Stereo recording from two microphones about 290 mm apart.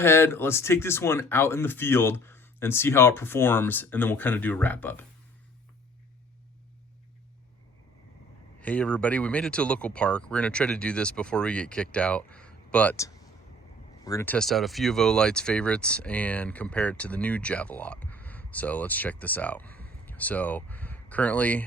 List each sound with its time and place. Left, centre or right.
0.0 s speech: centre
8.6 s speech: centre
19.6 s a sound: right
20.1 s speech: centre